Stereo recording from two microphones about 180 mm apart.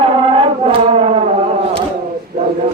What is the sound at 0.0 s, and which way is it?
Music, 30° right (ahead or behind).